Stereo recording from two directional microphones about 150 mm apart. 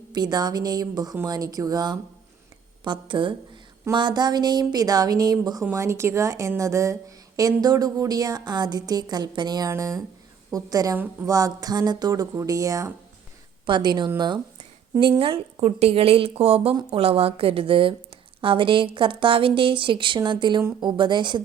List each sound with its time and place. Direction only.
0.1 s a woman's voice: 30° right (ahead or behind)
10.9 s a woman's voice: 15° right (ahead or behind)
11.3 s a woman's voice: 25° right (ahead or behind)